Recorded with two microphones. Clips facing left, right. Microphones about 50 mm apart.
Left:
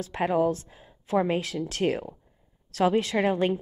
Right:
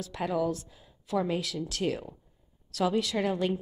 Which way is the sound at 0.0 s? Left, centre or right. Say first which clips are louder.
Left 5 dB; left.